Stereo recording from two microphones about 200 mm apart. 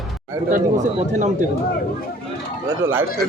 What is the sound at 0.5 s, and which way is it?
Speech, 35° right (ahead or behind).